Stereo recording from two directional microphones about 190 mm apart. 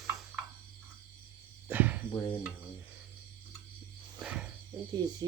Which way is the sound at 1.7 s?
10° right (ahead or behind).